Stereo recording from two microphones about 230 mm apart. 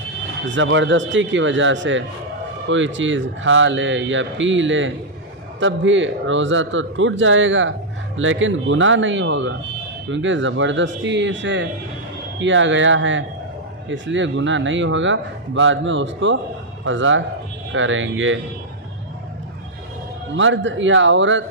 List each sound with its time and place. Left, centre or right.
0.4 s speech: right
20.3 s speech: right